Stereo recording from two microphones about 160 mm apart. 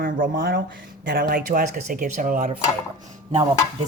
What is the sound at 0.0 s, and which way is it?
Speech, 65° right (ahead or behind).